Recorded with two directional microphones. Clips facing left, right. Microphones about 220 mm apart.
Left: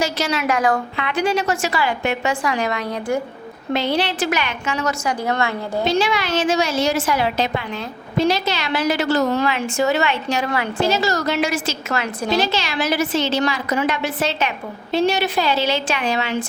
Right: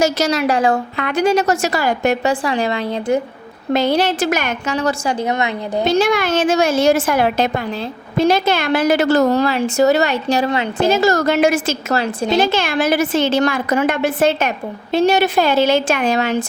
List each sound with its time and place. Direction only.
0.0 s a woman's voice: 40° right (ahead or behind)
0.9 s a woman's voice: 45° right (ahead or behind); by 3.2 s 25° right (ahead or behind)
3.7 s a woman's voice: 45° right (ahead or behind)
5.2 s a woman's voice: 20° right (ahead or behind)
5.8 s a woman's voice: 50° right (ahead or behind)
9.4 s a woman's voice: 35° right (ahead or behind)
10.5 s a woman's voice: 25° right (ahead or behind)
10.8 s a woman's voice: 50° right (ahead or behind)
11.9 s a woman's voice: 25° right (ahead or behind)
12.4 s a woman's voice: 55° right (ahead or behind)